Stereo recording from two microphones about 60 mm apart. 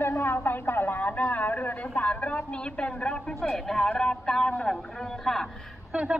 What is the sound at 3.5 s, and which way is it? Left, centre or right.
Speech, centre.